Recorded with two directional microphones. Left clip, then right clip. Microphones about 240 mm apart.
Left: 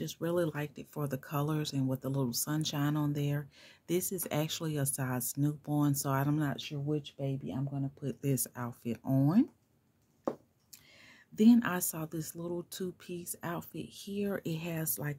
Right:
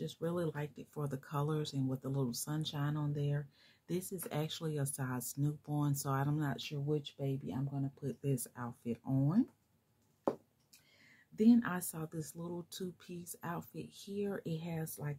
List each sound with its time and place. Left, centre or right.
0.0 s speech: left
11.3 s speech: left